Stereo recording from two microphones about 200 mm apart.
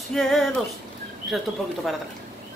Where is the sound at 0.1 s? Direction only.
Centre (ahead or behind).